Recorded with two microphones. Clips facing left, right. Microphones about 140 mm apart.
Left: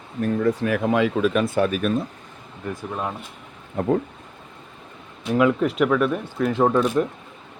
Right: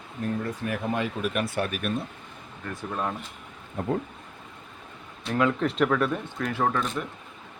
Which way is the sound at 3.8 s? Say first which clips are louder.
Left 6 dB; 70° left (ahead or behind).